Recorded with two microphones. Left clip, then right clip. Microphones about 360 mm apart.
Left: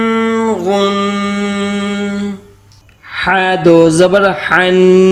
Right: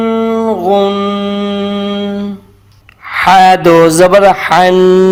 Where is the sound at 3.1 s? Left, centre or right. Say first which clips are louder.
Right 7 dB; centre.